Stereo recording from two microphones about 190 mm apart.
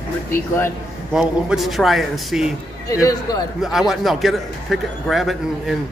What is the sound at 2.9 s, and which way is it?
Speech, 20° left (ahead or behind).